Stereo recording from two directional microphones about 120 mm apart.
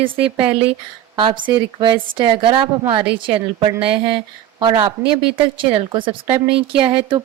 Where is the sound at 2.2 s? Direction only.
45° right (ahead or behind).